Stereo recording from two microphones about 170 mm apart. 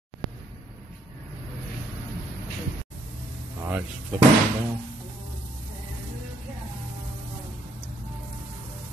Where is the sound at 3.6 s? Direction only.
10° right (ahead or behind).